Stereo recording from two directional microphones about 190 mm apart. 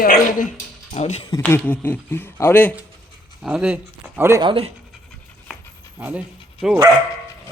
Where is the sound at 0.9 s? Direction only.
35° left (ahead or behind).